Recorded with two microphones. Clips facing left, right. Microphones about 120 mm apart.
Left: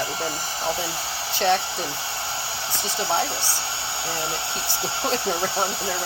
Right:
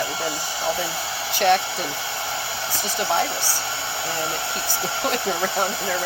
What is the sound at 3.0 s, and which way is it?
Speech, 30° left (ahead or behind).